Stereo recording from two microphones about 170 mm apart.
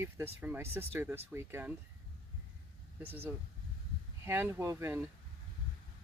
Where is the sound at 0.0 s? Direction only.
15° right (ahead or behind).